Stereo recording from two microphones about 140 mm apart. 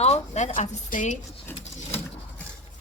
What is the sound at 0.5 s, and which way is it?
Speech, 65° left (ahead or behind).